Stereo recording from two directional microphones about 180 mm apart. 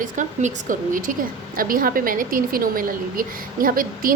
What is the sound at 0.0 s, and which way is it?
A woman's voice, 45° right (ahead or behind).